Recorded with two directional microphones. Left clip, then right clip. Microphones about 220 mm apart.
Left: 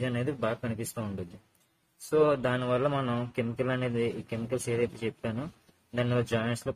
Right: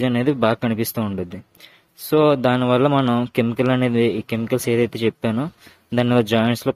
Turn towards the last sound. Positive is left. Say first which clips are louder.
# right 12 dB
turn(degrees=-40)  # may be behind; listen again after turning